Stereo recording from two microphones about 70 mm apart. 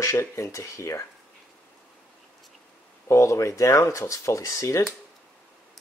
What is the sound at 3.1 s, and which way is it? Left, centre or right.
Speech, left.